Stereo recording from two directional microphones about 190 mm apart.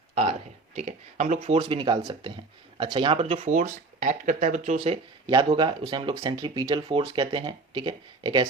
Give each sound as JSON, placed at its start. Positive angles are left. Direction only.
{"t": 0.8, "sound": "speech", "side_deg": -35}
{"t": 5.2, "sound": "speech", "side_deg": -25}